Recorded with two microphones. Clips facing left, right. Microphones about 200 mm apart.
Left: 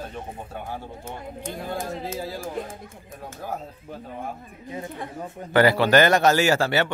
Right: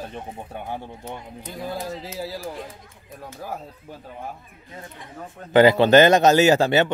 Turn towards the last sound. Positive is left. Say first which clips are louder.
# right 4 dB
turn(degrees=-20)  # may be behind; listen again after turning